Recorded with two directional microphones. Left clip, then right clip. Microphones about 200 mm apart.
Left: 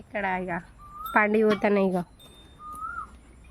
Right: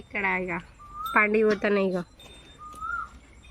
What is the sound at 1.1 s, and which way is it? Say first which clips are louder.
Speech: even; 50° left (ahead or behind).